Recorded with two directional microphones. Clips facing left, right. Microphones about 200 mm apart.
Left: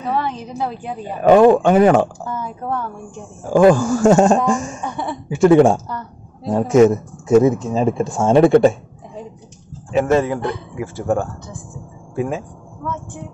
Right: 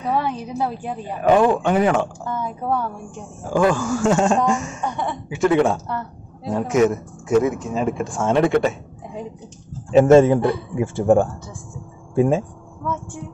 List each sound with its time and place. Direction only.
0.1 s a woman's voice: 10° right (ahead or behind)
1.2 s speech: 45° left (ahead or behind)
2.3 s speech: centre (ahead or behind)
3.4 s speech: 40° left (ahead or behind)
4.5 s speech: 30° left (ahead or behind)
5.5 s speech: 50° left (ahead or behind)
5.9 s speech: centre (ahead or behind)
6.5 s speech: 30° left (ahead or behind)
9.9 s speech: 25° right (ahead or behind)